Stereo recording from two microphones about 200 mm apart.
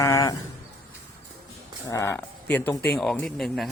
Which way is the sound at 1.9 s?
15° left (ahead or behind).